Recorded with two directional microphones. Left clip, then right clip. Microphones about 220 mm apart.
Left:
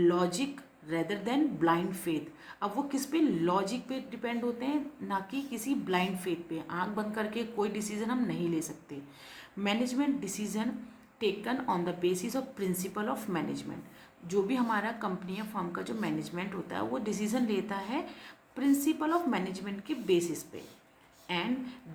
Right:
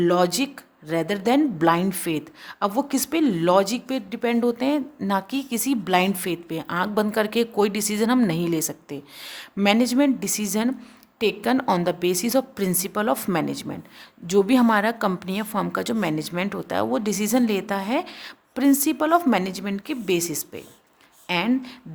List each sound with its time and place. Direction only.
0.0 s a woman's voice: 45° right (ahead or behind)